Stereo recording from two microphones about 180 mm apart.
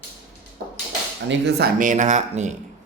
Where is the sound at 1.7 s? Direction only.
45° right (ahead or behind).